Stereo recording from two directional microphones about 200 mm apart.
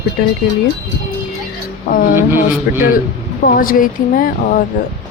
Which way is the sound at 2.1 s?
10° right (ahead or behind).